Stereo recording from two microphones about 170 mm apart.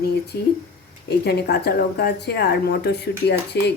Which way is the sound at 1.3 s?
70° left (ahead or behind).